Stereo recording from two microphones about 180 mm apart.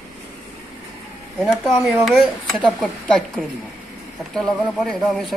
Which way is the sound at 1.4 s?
Centre (ahead or behind).